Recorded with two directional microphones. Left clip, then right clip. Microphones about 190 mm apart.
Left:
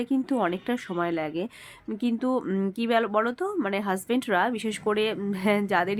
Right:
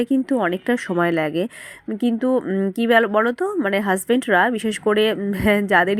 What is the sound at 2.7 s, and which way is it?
A woman's voice, 25° right (ahead or behind).